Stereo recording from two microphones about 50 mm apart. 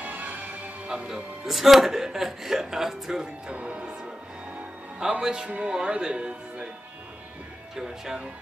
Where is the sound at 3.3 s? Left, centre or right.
Centre.